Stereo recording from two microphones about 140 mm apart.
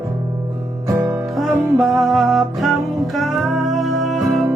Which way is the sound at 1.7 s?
Centre (ahead or behind).